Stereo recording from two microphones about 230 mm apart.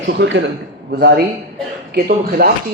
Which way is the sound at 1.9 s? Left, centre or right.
Right.